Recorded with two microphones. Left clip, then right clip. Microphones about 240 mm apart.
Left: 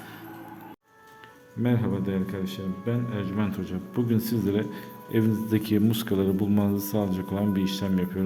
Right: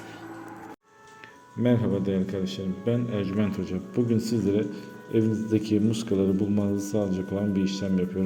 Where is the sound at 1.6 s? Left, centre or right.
Centre.